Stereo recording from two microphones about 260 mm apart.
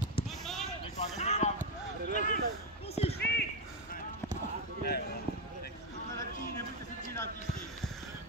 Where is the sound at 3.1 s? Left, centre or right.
Left.